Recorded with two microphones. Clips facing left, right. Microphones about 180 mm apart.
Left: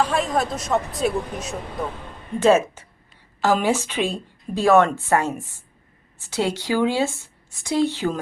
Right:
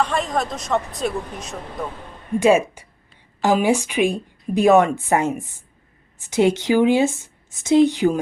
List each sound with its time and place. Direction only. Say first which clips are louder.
0.0 s a woman's voice: even; 5° left (ahead or behind)
2.4 s a woman's voice: even; 15° right (ahead or behind)